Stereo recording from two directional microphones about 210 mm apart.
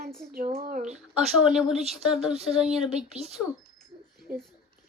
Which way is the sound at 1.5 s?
5° right (ahead or behind).